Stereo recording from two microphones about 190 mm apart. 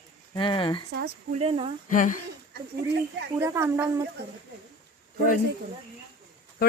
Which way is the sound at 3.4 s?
15° right (ahead or behind).